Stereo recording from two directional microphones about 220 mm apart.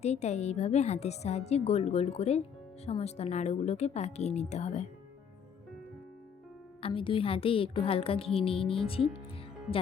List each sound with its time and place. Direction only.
0.0 s a woman's voice: 30° left (ahead or behind)
6.8 s a woman's voice: 25° left (ahead or behind)